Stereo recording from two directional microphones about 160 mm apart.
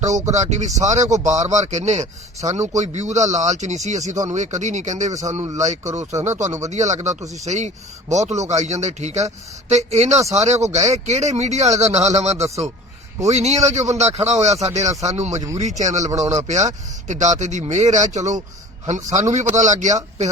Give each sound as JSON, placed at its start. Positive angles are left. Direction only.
{"t": 0.3, "sound": "a man's voice", "side_deg": -45}
{"t": 16.0, "sound": "speech", "side_deg": -20}
{"t": 16.5, "sound": "a man's voice", "side_deg": -45}